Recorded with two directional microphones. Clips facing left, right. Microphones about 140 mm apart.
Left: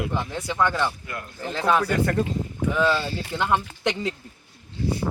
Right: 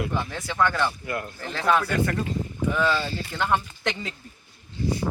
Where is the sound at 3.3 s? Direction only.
15° left (ahead or behind).